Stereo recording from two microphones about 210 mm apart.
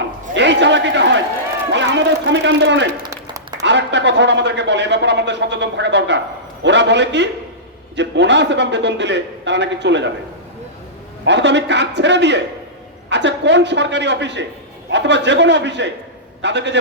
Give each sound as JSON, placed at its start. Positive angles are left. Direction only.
{"t": 0.3, "sound": "a sound", "side_deg": -55}
{"t": 1.7, "sound": "a man's voice", "side_deg": -55}
{"t": 3.1, "sound": "applause", "side_deg": -20}
{"t": 3.6, "sound": "a man's voice", "side_deg": -55}
{"t": 11.3, "sound": "a man's voice", "side_deg": -55}